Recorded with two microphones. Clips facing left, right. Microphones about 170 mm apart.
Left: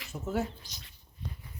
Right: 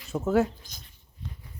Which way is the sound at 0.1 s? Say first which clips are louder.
Right 9 dB; 90° right.